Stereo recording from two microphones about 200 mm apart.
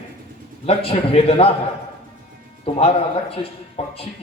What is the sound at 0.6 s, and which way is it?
Speech, 30° left (ahead or behind).